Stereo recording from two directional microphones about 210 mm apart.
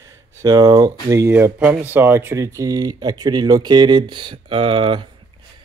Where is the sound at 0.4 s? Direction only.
20° right (ahead or behind).